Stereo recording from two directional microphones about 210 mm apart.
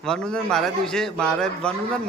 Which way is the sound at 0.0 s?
5° left (ahead or behind).